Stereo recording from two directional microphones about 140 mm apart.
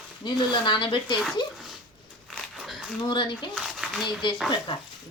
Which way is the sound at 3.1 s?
35° left (ahead or behind).